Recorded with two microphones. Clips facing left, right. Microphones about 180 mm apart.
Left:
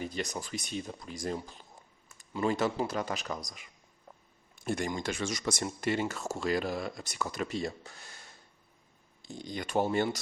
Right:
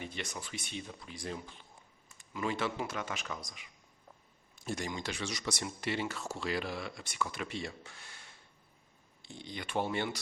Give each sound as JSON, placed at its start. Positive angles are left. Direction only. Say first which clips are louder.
{"t": 0.0, "sound": "speech", "louder": "left 6 dB", "side_deg": 40}
{"t": 4.6, "sound": "speech", "louder": "left 5 dB", "side_deg": 55}